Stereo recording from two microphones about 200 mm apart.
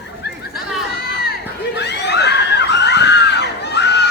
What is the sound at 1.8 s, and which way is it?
Screaming, 60° left (ahead or behind).